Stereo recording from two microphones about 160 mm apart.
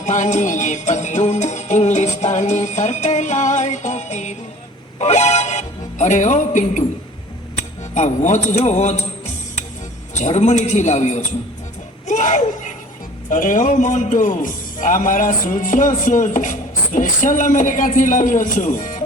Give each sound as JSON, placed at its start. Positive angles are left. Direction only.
{"t": 0.0, "sound": "music", "side_deg": 50}
{"t": 7.9, "sound": "speech", "side_deg": 45}
{"t": 12.0, "sound": "a sound", "side_deg": 50}
{"t": 13.3, "sound": "a man's voice", "side_deg": 55}